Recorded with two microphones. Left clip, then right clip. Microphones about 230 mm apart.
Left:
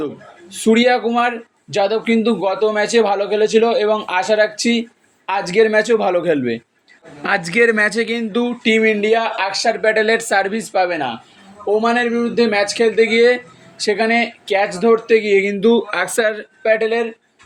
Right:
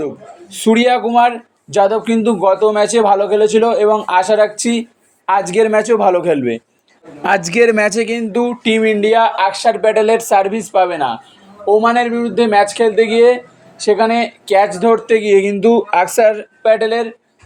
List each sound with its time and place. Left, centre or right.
0.5 s speech: right